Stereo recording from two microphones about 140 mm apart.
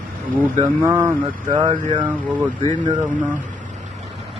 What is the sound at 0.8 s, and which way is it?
Speech, 15° right (ahead or behind).